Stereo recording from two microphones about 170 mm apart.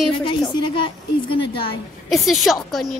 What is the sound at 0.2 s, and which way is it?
A woman's voice, 30° left (ahead or behind).